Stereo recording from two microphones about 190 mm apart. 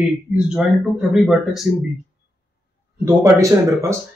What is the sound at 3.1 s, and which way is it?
Speech, 15° right (ahead or behind).